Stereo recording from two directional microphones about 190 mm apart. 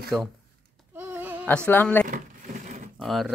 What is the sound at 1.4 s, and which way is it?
Speech, 10° left (ahead or behind).